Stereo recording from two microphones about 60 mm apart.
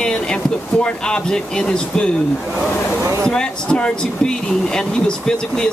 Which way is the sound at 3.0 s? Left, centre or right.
Right.